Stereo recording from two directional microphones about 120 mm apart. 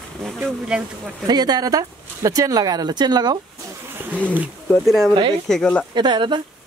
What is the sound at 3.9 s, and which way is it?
Speech, 15° right (ahead or behind).